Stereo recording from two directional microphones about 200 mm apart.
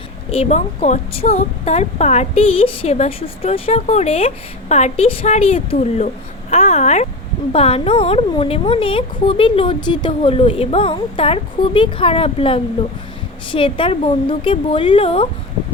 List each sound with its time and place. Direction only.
0.3 s a woman's voice: 30° left (ahead or behind)